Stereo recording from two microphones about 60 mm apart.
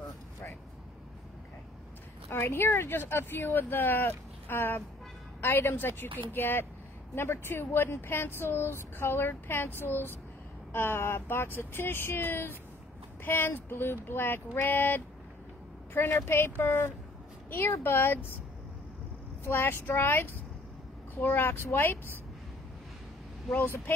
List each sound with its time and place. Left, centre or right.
2.3 s speech: left
19.4 s speech: left